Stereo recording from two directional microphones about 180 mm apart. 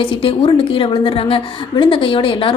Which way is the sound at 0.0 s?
30° left (ahead or behind).